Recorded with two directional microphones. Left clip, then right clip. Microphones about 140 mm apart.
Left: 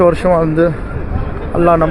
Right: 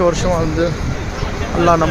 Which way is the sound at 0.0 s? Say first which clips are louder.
Left 5 dB; 10° left (ahead or behind).